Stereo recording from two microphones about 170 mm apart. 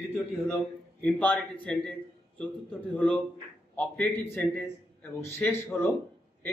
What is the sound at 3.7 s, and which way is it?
A man's voice, 10° left (ahead or behind).